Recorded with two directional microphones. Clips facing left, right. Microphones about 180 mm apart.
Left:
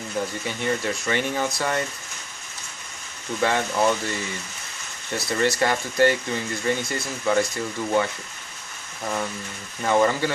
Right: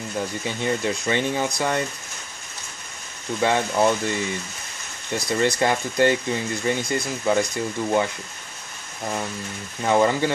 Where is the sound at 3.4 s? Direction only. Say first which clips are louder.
Right 2 dB; 20° right (ahead or behind).